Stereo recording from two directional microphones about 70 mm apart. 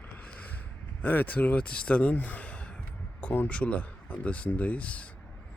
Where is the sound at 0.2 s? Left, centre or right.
Left.